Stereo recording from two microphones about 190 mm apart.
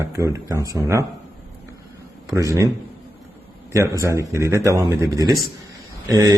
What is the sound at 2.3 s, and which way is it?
Speech, 15° right (ahead or behind).